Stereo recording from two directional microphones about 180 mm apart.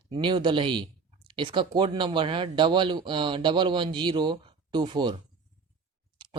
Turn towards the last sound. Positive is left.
turn(degrees=-25)  # may be behind; listen again after turning